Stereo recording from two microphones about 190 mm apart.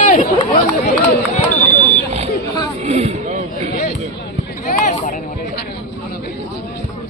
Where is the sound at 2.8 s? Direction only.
35° right (ahead or behind).